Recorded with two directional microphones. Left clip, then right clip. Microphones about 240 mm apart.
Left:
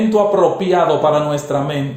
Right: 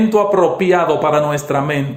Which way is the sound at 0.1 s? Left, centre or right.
Right.